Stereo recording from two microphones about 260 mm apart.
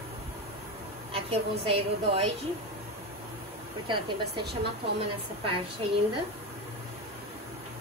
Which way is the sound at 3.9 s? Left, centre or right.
Centre.